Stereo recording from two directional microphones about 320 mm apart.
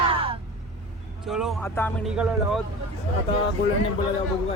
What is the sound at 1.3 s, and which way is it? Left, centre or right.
Speech, centre.